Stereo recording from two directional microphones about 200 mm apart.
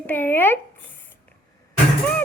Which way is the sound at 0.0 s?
10° left (ahead or behind).